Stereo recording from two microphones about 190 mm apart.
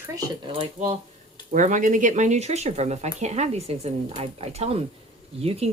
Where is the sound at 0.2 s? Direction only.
25° right (ahead or behind).